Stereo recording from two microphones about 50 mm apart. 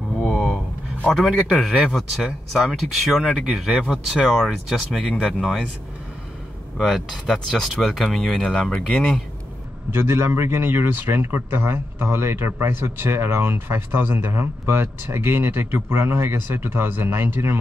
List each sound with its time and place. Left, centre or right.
0.3 s a sound: centre
1.1 s speech: centre
6.8 s speech: centre
9.8 s a man's voice: right